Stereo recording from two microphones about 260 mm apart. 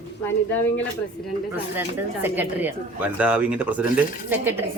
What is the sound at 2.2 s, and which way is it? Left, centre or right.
Speech, centre.